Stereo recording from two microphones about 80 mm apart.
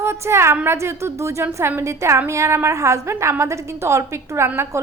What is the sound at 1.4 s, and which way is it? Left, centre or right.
A woman's voice, right.